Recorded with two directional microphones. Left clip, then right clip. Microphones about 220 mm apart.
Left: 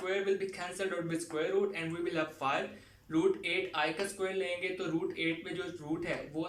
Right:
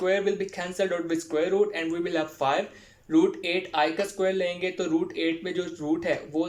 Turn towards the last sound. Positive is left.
turn(degrees=-40)  # may be behind; listen again after turning